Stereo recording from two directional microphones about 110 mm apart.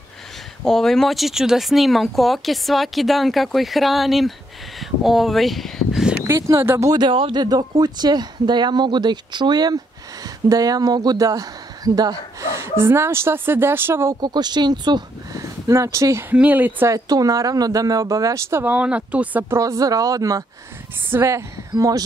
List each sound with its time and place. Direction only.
0.7 s speech: 5° left (ahead or behind)
6.2 s speech: 25° right (ahead or behind)
6.9 s speech: 45° right (ahead or behind)
7.4 s speech: 35° right (ahead or behind); by 14.1 s 20° right (ahead or behind)
14.2 s speech: 40° right (ahead or behind); by 16.9 s 15° right (ahead or behind)
16.9 s speech: 35° right (ahead or behind); by 19.4 s 10° right (ahead or behind)
19.5 s speech: 30° right (ahead or behind)